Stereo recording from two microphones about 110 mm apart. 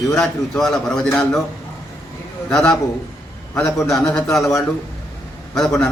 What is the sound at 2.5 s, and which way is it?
Speech, 5° left (ahead or behind).